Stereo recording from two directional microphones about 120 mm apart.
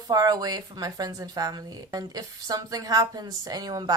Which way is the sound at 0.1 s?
35° right (ahead or behind).